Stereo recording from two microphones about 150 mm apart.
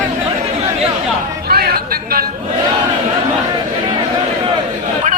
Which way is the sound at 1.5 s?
90° right.